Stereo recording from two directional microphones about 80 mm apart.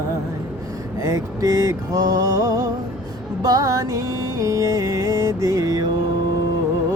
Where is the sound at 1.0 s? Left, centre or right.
Right.